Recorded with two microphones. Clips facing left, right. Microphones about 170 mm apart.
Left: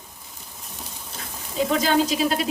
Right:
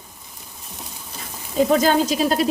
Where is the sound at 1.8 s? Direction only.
45° right (ahead or behind).